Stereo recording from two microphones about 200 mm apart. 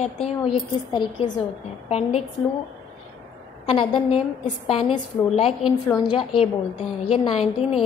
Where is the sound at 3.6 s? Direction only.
25° left (ahead or behind).